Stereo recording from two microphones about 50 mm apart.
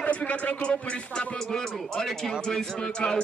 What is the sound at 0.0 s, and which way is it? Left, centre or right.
Speech, left.